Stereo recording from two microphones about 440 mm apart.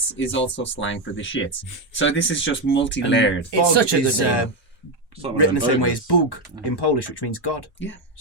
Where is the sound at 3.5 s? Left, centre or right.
Right.